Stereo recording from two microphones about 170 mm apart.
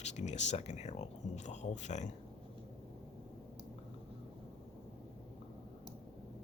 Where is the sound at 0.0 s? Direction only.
40° left (ahead or behind).